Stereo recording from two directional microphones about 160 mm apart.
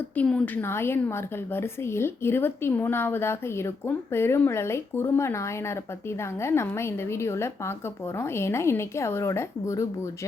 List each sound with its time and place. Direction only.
0.2 s a woman's voice: 10° left (ahead or behind)